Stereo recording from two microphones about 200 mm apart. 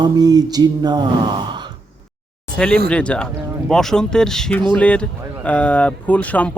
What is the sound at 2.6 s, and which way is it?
Speech, 5° left (ahead or behind).